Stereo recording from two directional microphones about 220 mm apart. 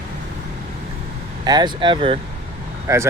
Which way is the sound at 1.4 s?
20° right (ahead or behind).